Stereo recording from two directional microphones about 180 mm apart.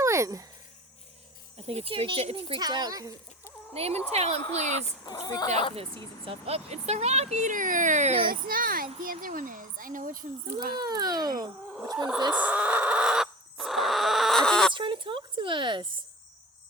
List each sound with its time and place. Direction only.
0.0 s a sound: 15° right (ahead or behind)
1.5 s speech: 35° right (ahead or behind)
3.8 s speech: 35° right (ahead or behind)
5.0 s speech: 20° left (ahead or behind)
5.7 s speech: 30° right (ahead or behind); by 10.2 s 50° right (ahead or behind)
10.8 s speech: 20° right (ahead or behind)
12.3 s bird: 10° right (ahead or behind)
14.7 s a woman's voice: 25° right (ahead or behind)